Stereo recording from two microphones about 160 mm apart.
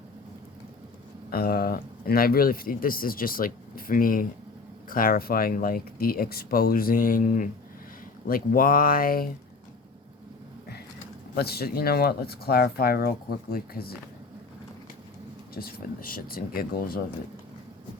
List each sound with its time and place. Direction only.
1.3 s speech: 70° left (ahead or behind)
11.3 s speech: 75° left (ahead or behind)
15.5 s speech: 70° left (ahead or behind)